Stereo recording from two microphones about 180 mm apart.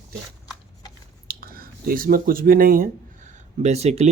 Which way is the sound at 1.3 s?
55° right (ahead or behind).